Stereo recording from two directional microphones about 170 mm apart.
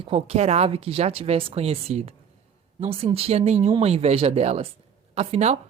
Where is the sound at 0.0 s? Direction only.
35° right (ahead or behind).